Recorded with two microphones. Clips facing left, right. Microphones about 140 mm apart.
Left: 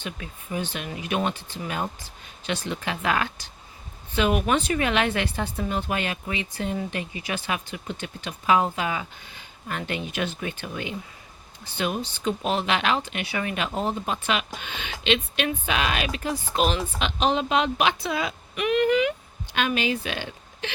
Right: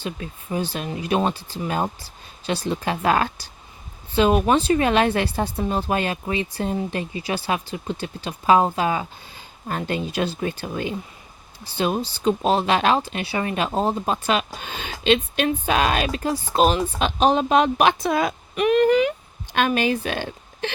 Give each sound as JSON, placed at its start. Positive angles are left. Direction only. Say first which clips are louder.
{"t": 0.0, "sound": "a woman's voice", "louder": "right 5 dB", "side_deg": -35}